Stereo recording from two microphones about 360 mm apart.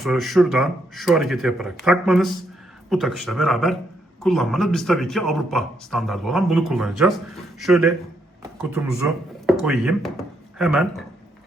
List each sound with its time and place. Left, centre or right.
0.0 s a man's voice: centre